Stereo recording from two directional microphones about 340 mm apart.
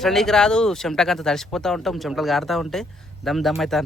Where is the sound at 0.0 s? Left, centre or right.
Centre.